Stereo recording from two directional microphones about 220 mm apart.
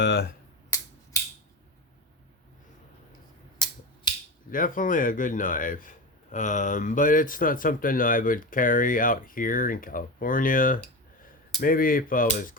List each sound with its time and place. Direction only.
0.0 s speech: 50° left (ahead or behind)
0.7 s a sound: 15° left (ahead or behind)
3.6 s finger snapping: 20° left (ahead or behind)
4.5 s speech: 40° left (ahead or behind)